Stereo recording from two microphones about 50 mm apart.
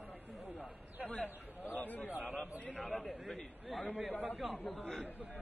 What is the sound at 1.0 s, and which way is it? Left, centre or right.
Speech, centre.